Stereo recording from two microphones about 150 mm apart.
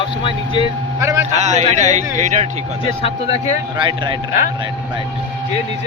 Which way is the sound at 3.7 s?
30° right (ahead or behind).